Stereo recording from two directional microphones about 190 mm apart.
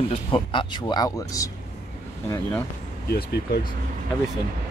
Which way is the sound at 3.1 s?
55° left (ahead or behind).